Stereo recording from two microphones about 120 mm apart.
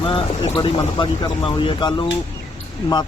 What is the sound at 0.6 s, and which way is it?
Speech, 45° left (ahead or behind).